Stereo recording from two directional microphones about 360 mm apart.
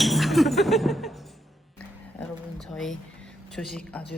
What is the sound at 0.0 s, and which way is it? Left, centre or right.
Music, centre.